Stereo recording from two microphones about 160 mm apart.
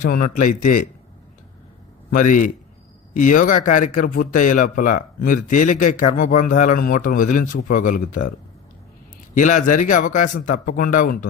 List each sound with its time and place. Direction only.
0.0 s a man's voice: 55° left (ahead or behind)
2.0 s a man's voice: 55° left (ahead or behind)
9.3 s speech: 50° left (ahead or behind)